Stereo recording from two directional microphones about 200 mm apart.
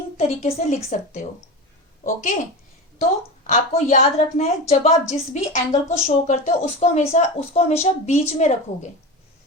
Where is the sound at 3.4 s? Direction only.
35° left (ahead or behind).